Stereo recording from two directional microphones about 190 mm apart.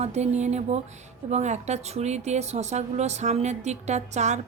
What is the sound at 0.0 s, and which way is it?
Speech, 35° right (ahead or behind).